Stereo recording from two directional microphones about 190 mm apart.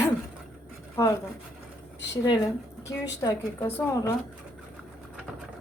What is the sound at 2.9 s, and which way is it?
A woman's voice, 15° left (ahead or behind).